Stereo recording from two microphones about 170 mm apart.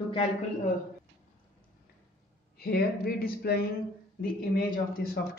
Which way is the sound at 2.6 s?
65° left (ahead or behind).